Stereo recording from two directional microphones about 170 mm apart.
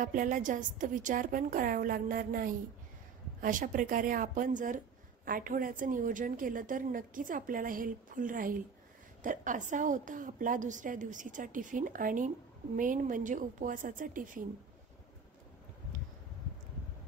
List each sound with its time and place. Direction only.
0.0 s speech: 50° right (ahead or behind)